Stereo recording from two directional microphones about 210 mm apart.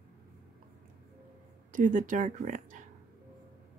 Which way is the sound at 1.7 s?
35° right (ahead or behind).